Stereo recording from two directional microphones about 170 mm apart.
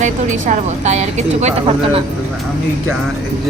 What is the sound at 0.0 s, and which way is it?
Speech, 45° right (ahead or behind).